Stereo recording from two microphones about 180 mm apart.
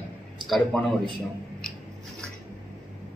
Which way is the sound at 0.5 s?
Centre (ahead or behind).